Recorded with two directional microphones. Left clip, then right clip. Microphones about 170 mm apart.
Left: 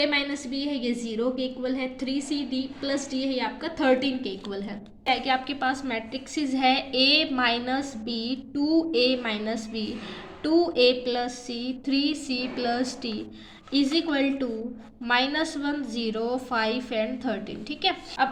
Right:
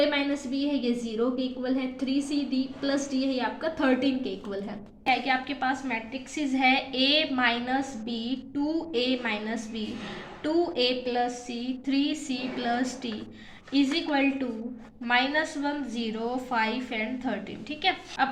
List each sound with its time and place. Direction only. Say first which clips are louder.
0.6 s a woman's voice: even; 20° left (ahead or behind)
5.0 s a woman's voice: left 1 dB; 30° left (ahead or behind)